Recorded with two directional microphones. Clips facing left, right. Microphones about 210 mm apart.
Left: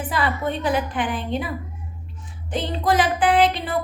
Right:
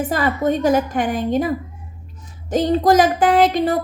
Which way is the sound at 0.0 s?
45° right (ahead or behind).